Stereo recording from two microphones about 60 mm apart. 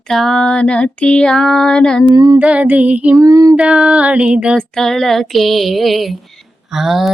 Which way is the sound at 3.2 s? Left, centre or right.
Right.